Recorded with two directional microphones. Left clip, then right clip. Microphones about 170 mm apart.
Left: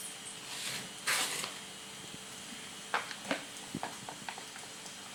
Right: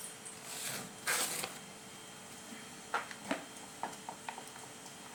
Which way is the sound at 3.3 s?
30° left (ahead or behind).